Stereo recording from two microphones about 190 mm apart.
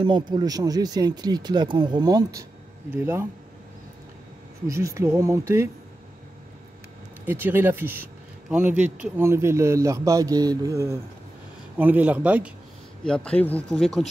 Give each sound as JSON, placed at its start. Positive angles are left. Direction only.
{"t": 0.3, "sound": "speech", "side_deg": -20}
{"t": 4.6, "sound": "speech", "side_deg": -15}
{"t": 7.2, "sound": "speech", "side_deg": -10}
{"t": 13.0, "sound": "speech", "side_deg": 5}